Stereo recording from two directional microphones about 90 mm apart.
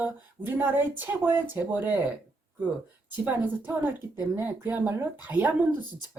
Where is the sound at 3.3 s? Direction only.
20° right (ahead or behind).